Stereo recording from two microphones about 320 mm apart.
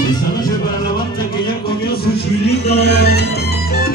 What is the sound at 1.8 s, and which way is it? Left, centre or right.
Music, left.